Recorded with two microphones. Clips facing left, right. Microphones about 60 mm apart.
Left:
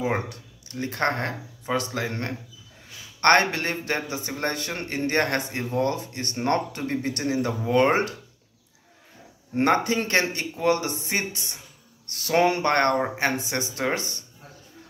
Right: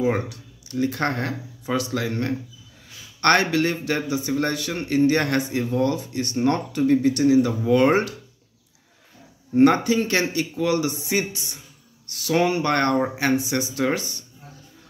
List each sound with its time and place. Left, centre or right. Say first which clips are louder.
0.3 s speech: right 6 dB; left
3.3 s speech: right 2 dB; left
5.9 s speech: right 6 dB; left
9.6 s speech: right 5 dB; left